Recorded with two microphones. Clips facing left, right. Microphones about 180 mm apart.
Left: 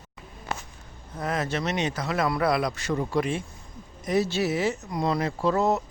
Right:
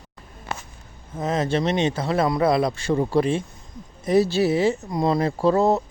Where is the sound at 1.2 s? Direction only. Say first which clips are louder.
Right 6 dB; 25° right (ahead or behind).